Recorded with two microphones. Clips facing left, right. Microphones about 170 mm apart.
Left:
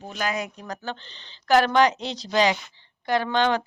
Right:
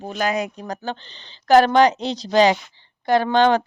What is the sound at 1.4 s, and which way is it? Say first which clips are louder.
Speech: right 5 dB; 35° right (ahead or behind).